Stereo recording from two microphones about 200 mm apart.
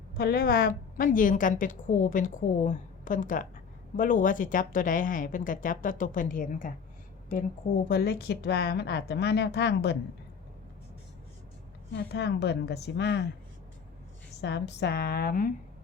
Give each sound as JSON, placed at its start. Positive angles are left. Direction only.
{"t": 0.2, "sound": "a woman's voice", "side_deg": 50}
{"t": 11.9, "sound": "a woman's voice", "side_deg": 60}
{"t": 14.4, "sound": "a woman's voice", "side_deg": 60}